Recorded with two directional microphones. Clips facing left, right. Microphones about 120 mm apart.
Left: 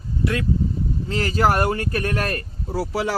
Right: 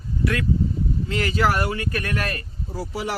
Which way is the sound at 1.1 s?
35° left (ahead or behind).